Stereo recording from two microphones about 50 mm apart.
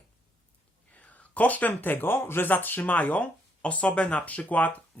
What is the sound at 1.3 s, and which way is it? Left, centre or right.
Speech, left.